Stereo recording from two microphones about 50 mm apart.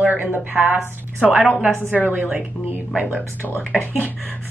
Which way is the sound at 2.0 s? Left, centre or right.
Right.